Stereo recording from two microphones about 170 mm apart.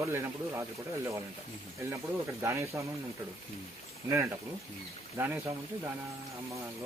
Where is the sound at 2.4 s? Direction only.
15° right (ahead or behind).